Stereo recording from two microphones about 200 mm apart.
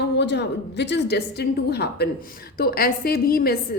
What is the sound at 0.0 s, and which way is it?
A woman's voice, 55° left (ahead or behind).